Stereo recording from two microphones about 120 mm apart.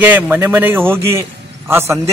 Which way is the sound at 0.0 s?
15° right (ahead or behind).